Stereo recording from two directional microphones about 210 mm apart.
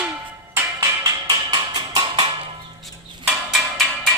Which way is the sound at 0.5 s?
15° right (ahead or behind).